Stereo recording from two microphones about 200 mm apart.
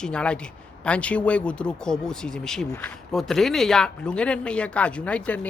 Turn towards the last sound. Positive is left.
turn(degrees=5)  # may be behind; listen again after turning